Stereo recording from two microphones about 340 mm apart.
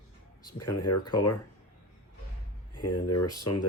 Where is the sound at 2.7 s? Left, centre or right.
Left.